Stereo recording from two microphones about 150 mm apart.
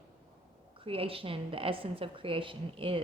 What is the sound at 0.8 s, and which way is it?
A woman's voice, 40° right (ahead or behind).